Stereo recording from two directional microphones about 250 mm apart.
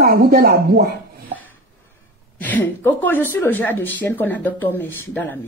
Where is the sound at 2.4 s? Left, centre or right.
Centre.